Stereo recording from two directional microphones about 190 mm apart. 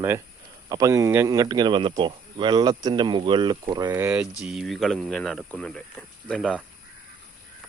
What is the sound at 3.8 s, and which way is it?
Speech, 10° right (ahead or behind).